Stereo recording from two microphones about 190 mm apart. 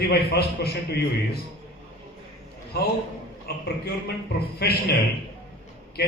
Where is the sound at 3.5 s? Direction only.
55° left (ahead or behind).